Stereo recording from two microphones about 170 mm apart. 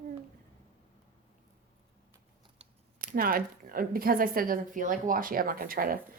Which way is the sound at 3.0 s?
55° right (ahead or behind).